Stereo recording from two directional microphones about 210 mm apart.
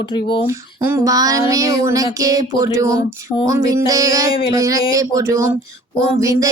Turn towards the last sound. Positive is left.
turn(degrees=-15)  # may be behind; listen again after turning